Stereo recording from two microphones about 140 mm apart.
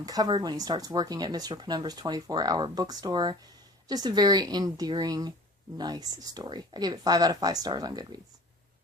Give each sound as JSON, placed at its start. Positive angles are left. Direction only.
{"t": 0.0, "sound": "speech", "side_deg": -25}